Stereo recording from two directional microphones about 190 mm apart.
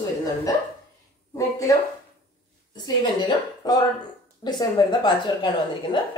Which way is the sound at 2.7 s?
20° left (ahead or behind).